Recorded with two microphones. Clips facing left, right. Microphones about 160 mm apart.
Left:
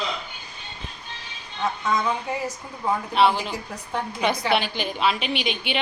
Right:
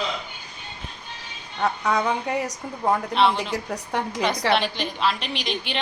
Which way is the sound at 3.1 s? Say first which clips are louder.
Left 5 dB; 5° left (ahead or behind).